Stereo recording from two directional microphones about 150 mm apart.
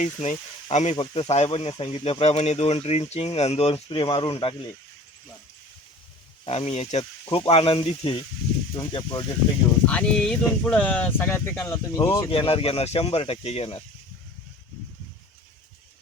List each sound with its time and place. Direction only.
0.0 s speech: 50° left (ahead or behind)
0.9 s speech: 40° left (ahead or behind)
6.4 s speech: 45° left (ahead or behind)
9.8 s speech: 10° left (ahead or behind)
12.3 s speech: 40° left (ahead or behind)